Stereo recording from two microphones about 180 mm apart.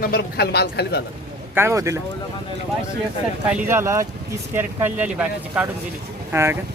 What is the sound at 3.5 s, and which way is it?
Speech, 10° right (ahead or behind).